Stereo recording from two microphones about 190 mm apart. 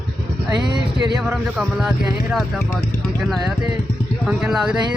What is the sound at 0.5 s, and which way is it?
Speech, 25° right (ahead or behind).